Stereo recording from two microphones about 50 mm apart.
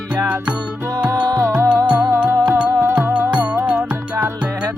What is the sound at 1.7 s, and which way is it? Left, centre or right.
Music, right.